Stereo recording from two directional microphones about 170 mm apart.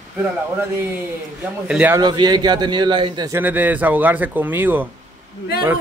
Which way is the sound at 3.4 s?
10° right (ahead or behind).